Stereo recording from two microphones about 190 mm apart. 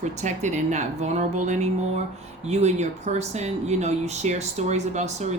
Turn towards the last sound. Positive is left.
turn(degrees=-35)  # may be behind; listen again after turning